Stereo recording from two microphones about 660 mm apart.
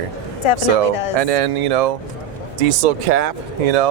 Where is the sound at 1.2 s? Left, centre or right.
Right.